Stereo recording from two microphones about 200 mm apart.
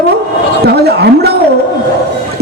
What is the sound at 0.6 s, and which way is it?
Speech, 55° right (ahead or behind).